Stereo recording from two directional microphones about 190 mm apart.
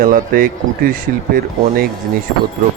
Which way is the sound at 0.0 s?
50° right (ahead or behind).